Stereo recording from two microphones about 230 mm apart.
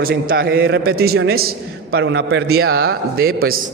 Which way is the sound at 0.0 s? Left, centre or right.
Right.